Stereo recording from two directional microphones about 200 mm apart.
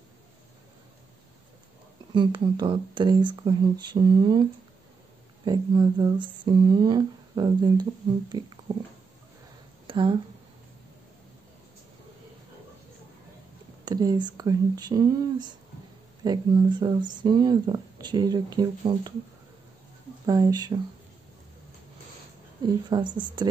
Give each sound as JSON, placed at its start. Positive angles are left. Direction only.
{"t": 2.1, "sound": "speech", "side_deg": -20}
{"t": 9.8, "sound": "a sound", "side_deg": -25}
{"t": 13.8, "sound": "speech", "side_deg": -20}
{"t": 20.2, "sound": "speech", "side_deg": -20}
{"t": 22.8, "sound": "speech", "side_deg": -20}